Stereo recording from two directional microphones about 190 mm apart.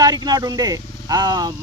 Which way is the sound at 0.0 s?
20° right (ahead or behind).